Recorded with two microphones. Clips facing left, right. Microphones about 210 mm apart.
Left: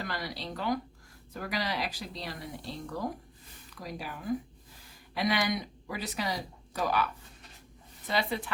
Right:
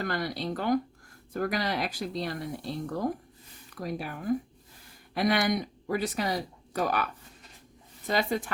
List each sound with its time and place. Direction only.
0.0 s speech: 50° right (ahead or behind)